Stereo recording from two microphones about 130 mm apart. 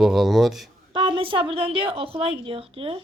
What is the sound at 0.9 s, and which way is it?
A woman's voice, 40° right (ahead or behind).